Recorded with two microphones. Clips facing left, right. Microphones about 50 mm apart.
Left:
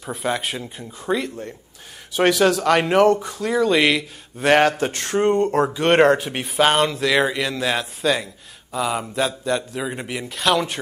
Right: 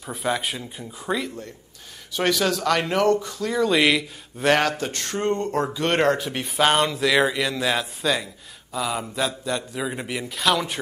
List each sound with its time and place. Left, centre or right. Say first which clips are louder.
0.0 s speech: left 1 dB; centre
2.1 s speech: left 5 dB; centre
3.5 s speech: left 2 dB; centre
4.6 s speech: left 5 dB; left
5.2 s speech: left 6 dB; centre
5.5 s speech: left 5 dB; centre
6.4 s a man's voice: left 1 dB; centre